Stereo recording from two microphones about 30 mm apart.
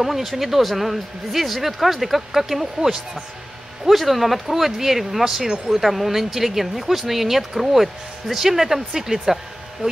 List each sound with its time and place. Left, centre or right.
0.0 s speech: centre
3.9 s speech: centre